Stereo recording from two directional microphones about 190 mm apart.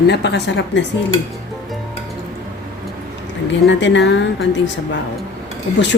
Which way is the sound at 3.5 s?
70° left (ahead or behind).